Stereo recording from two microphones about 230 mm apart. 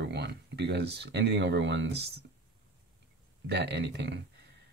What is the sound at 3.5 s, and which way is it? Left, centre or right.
Speech, right.